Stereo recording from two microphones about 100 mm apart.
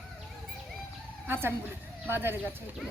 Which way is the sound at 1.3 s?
25° right (ahead or behind).